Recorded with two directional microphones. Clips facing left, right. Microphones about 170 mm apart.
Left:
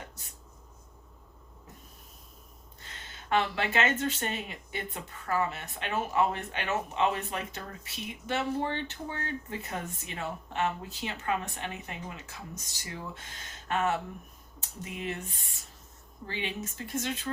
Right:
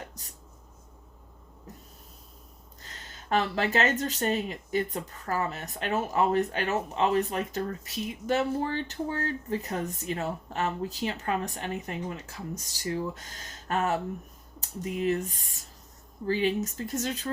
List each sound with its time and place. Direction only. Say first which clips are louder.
2.8 s speech: right 2 dB; 40° right (ahead or behind)